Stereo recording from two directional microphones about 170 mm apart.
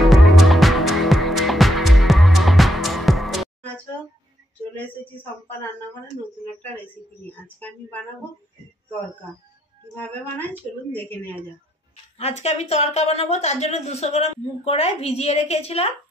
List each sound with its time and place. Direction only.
0.0 s music: centre (ahead or behind)
4.7 s a woman's voice: 10° left (ahead or behind)
7.2 s a woman's voice: 10° left (ahead or behind)
9.9 s a woman's voice: 10° left (ahead or behind)
12.2 s a woman's voice: 35° left (ahead or behind)